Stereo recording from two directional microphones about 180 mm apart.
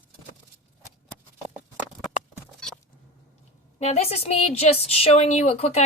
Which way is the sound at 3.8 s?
35° left (ahead or behind).